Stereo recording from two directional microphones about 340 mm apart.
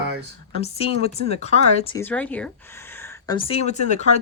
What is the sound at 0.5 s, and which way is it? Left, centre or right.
Speech, centre.